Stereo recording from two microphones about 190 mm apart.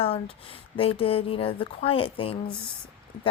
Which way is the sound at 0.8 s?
30° left (ahead or behind).